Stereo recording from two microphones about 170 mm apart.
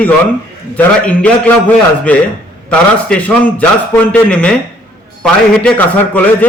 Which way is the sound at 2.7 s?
5° left (ahead or behind).